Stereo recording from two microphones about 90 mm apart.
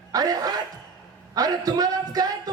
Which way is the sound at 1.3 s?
45° right (ahead or behind).